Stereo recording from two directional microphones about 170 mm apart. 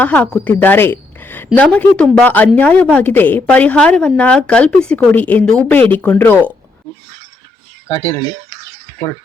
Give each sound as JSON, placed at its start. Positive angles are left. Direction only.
{"t": 0.0, "sound": "a woman's voice", "side_deg": 10}
{"t": 7.9, "sound": "speech", "side_deg": 25}